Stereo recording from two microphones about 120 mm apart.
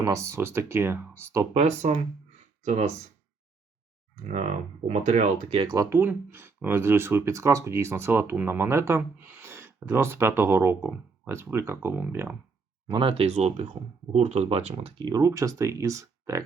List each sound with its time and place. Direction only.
0.0 s speech: 25° right (ahead or behind)
1.5 s speech: 70° right (ahead or behind)
4.2 s speech: 75° right (ahead or behind)
5.6 s speech: 30° right (ahead or behind)
12.9 s speech: 45° right (ahead or behind)
15.0 s speech: 30° right (ahead or behind)